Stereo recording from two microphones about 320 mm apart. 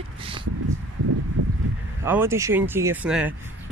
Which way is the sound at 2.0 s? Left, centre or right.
Centre.